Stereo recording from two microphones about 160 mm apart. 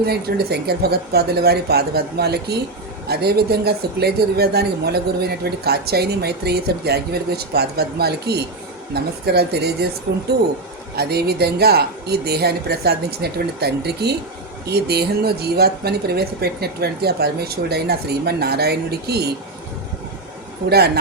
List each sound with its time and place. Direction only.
0.0 s speech: 85° right
10.9 s speech: 85° right
20.7 s speech: 85° right